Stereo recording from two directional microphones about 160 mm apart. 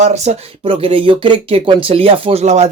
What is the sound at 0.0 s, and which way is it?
Speech, 45° right (ahead or behind).